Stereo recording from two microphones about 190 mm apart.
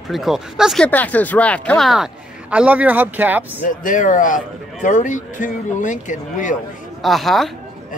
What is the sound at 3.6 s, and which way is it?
Speech, 45° left (ahead or behind).